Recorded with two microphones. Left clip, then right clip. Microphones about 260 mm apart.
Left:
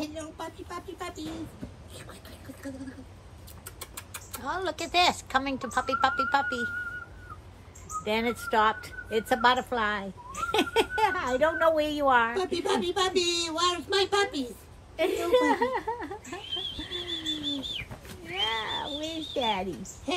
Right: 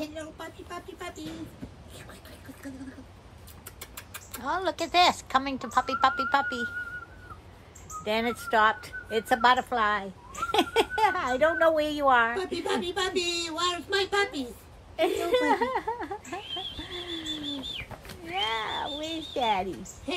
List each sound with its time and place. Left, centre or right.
0.0 s speech: centre
3.8 s vehicle: centre
4.4 s a woman's voice: right
8.0 s a child's voice: right
12.4 s a woman's voice: centre
15.0 s a child's voice: right
16.7 s bird flight: centre
18.5 s a sound: right
20.1 s a woman's voice: centre